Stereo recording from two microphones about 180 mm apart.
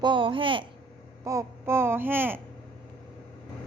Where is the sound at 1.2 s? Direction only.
15° right (ahead or behind).